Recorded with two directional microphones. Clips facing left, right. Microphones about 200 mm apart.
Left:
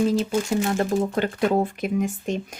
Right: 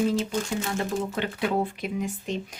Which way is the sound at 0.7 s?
45° left (ahead or behind).